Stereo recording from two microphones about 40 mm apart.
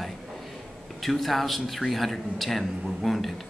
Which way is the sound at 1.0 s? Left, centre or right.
Centre.